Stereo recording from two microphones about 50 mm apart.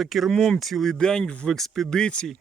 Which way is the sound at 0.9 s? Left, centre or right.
Centre.